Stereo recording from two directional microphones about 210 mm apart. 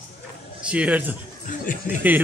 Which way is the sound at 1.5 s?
40° left (ahead or behind).